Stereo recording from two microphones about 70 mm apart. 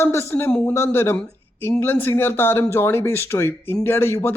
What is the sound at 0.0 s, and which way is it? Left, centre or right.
Speech, left.